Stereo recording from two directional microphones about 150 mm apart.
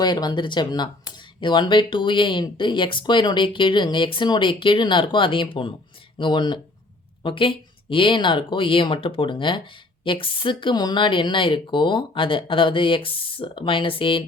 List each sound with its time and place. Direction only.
0.0 s speech: 30° left (ahead or behind)